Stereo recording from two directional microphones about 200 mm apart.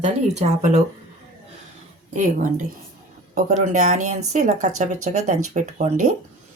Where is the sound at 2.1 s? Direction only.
40° right (ahead or behind).